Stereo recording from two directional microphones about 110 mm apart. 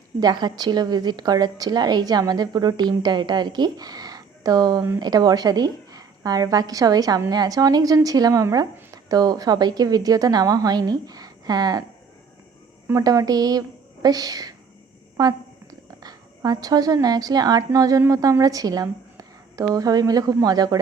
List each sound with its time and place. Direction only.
0.2 s a woman's voice: 40° right (ahead or behind)
12.9 s a woman's voice: 30° right (ahead or behind)